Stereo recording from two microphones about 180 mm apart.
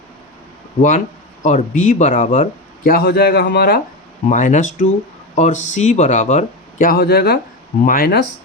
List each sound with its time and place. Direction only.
0.8 s speech: 45° left (ahead or behind); by 3.8 s 65° left (ahead or behind)
4.3 s speech: 45° left (ahead or behind)